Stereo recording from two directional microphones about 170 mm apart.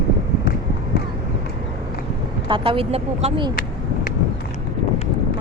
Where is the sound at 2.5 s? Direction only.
35° right (ahead or behind).